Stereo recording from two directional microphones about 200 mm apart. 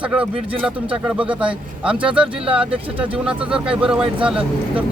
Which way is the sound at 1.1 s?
5° right (ahead or behind).